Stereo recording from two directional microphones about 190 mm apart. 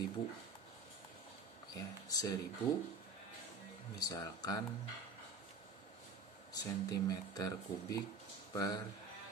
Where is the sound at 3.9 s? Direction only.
20° left (ahead or behind).